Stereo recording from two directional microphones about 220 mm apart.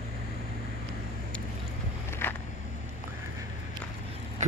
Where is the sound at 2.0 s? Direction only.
10° left (ahead or behind).